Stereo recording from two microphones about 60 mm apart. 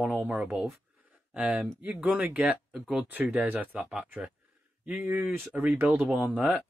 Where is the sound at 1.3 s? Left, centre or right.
Right.